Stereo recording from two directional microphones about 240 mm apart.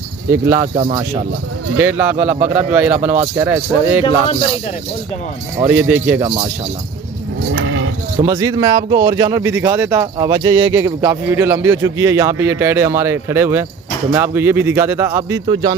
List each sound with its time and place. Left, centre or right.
0.3 s speech: centre
1.8 s speech: centre
5.6 s speech: centre
7.5 s sheep: right
8.2 s speech: centre